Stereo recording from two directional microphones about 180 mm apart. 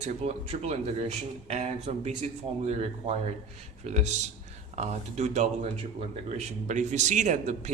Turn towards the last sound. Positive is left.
turn(degrees=-40)  # may be behind; listen again after turning